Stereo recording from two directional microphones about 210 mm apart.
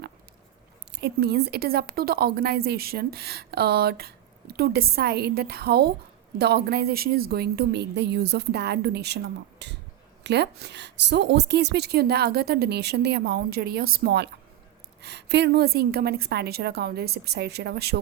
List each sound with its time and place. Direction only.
0.9 s a woman's voice: 50° right (ahead or behind)